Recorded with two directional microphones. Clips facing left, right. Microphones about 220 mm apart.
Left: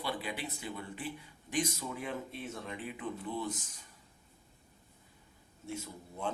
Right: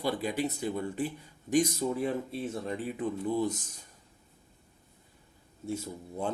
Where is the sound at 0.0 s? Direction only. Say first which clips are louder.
Right 8 dB; 40° right (ahead or behind).